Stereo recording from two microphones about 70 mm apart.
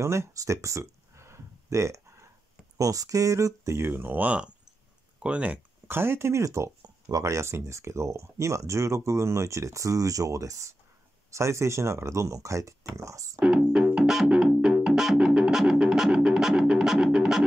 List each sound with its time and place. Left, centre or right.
0.0 s a sound: right
2.8 s speech: right
3.9 s speech: right
5.9 s speech: right
6.8 s speech: right
13.4 s music: centre